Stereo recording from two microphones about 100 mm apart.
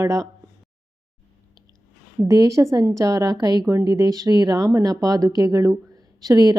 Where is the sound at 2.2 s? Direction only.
35° right (ahead or behind).